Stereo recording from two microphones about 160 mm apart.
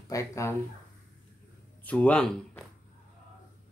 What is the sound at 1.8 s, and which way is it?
Speech, 10° left (ahead or behind).